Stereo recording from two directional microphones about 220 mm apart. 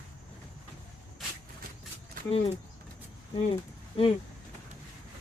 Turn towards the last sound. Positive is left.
turn(degrees=25)  # may be behind; listen again after turning